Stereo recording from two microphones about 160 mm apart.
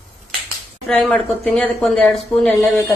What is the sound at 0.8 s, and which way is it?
A woman's voice, 5° left (ahead or behind).